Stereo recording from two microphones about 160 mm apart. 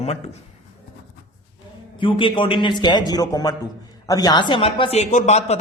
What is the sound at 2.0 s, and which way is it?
Speech, 30° left (ahead or behind).